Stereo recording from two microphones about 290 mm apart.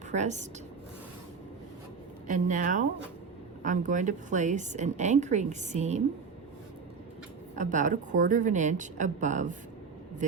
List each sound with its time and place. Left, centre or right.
0.1 s a woman's voice: right
2.2 s a woman's voice: right
7.5 s a woman's voice: right